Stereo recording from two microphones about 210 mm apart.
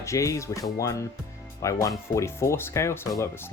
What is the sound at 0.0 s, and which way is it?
Speech, 15° left (ahead or behind).